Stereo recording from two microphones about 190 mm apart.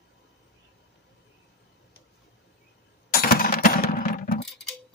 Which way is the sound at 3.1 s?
50° left (ahead or behind).